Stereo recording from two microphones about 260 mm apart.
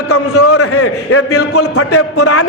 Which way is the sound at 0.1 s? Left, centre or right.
Left.